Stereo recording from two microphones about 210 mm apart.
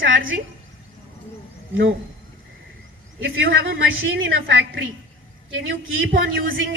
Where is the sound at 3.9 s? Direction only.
70° right (ahead or behind).